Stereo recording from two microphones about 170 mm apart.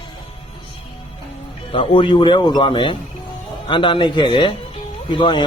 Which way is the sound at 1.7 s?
30° left (ahead or behind).